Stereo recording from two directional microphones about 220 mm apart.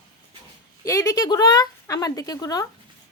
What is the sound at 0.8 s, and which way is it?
Speech, 15° left (ahead or behind).